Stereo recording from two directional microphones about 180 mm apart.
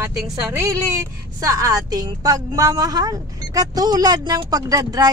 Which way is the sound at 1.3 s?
20° right (ahead or behind).